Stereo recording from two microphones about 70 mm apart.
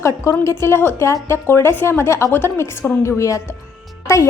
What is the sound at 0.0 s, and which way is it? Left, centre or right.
A woman's voice, left.